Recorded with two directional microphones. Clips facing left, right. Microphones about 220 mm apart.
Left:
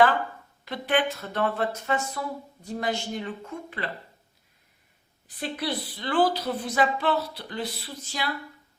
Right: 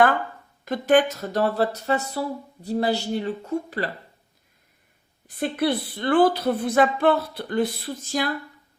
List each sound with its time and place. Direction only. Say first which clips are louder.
0.6 s speech: right 7 dB; 45° right (ahead or behind)
5.3 s speech: right 7 dB; 55° right (ahead or behind)